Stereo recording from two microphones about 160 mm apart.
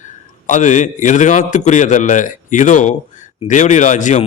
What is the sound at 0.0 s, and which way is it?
A man's voice, 50° left (ahead or behind).